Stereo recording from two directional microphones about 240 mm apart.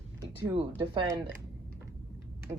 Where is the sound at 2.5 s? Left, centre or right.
Centre.